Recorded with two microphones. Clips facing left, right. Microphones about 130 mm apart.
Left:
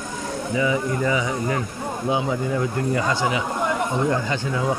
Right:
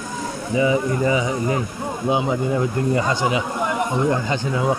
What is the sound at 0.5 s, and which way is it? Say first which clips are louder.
Speech: right 4 dB; 25° right (ahead or behind).